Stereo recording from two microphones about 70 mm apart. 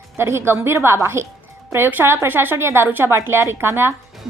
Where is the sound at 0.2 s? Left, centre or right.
Right.